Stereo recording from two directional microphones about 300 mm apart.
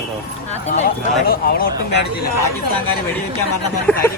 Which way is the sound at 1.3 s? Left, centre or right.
Left.